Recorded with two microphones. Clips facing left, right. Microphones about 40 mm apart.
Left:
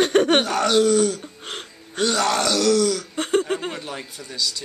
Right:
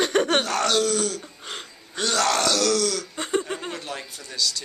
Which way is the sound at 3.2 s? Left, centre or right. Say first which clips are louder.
Left 5 dB; left.